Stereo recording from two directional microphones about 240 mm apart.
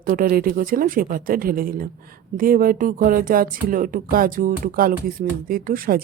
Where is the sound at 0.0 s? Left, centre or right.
Right.